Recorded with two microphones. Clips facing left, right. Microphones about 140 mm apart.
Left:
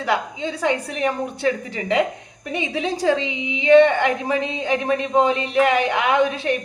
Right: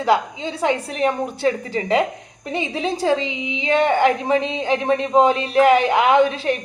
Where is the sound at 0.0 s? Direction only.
30° right (ahead or behind).